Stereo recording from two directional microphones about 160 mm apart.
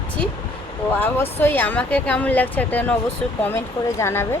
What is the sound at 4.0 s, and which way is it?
Speech, 15° left (ahead or behind).